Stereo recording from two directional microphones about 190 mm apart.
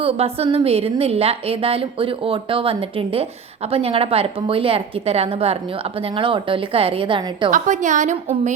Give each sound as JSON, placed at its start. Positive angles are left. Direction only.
{"t": 0.0, "sound": "a woman's voice", "side_deg": -30}
{"t": 7.5, "sound": "a woman's voice", "side_deg": -40}